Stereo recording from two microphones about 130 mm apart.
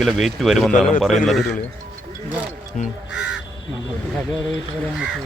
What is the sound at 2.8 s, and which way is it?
Speech, 70° left (ahead or behind).